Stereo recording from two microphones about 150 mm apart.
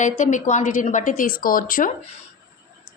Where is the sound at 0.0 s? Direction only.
55° left (ahead or behind).